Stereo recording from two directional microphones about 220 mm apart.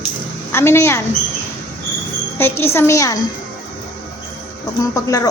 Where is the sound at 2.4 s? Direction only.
10° left (ahead or behind).